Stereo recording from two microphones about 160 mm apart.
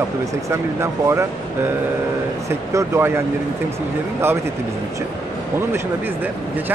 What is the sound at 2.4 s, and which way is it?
Speech, 15° right (ahead or behind).